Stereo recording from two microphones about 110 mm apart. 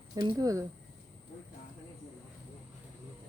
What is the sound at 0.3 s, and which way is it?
Speech, 30° right (ahead or behind).